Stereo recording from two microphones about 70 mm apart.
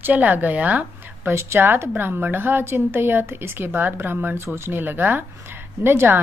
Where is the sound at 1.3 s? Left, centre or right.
Right.